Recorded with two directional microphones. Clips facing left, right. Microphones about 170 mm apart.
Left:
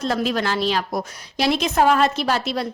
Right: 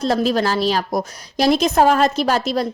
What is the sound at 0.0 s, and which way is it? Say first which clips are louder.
A woman's voice: right 4 dB; 35° right (ahead or behind).